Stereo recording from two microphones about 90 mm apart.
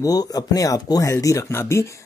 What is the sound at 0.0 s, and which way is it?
Speech, 45° left (ahead or behind).